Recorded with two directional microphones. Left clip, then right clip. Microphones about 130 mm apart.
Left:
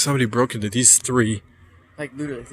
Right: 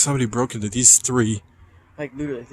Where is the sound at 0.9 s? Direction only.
20° right (ahead or behind).